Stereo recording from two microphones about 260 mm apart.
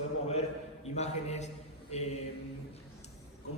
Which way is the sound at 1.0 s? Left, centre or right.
Left.